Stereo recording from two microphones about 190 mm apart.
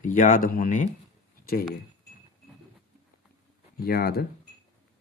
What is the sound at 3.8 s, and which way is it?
Speech, 50° left (ahead or behind).